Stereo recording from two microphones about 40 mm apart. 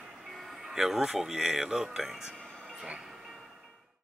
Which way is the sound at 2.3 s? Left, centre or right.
Left.